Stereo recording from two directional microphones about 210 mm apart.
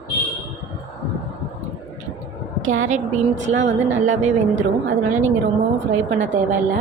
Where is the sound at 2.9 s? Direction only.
35° right (ahead or behind).